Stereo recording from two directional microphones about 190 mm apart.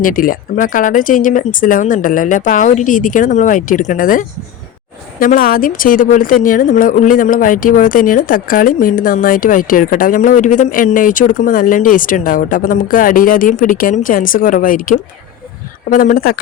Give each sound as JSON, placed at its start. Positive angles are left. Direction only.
{"t": 0.0, "sound": "a woman's voice", "side_deg": 45}